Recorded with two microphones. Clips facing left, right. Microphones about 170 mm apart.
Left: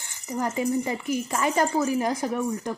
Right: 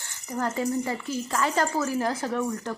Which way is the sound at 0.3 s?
10° left (ahead or behind).